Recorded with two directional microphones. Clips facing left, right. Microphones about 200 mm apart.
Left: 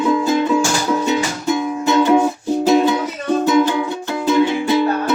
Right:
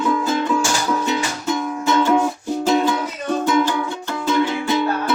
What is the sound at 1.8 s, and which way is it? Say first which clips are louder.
Music: left 3 dB; 15° left (ahead or behind).